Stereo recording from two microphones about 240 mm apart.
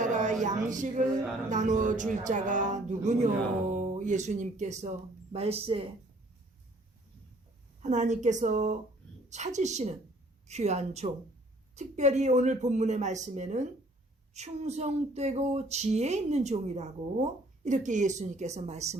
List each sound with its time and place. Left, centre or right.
0.0 s a sound: right
1.5 s speech: right
7.8 s speech: right